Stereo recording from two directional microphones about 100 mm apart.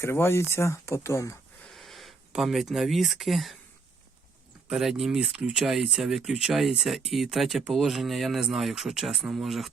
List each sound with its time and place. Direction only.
0.0 s speech: 25° left (ahead or behind)
1.6 s speech: centre (ahead or behind)
4.7 s speech: 5° right (ahead or behind)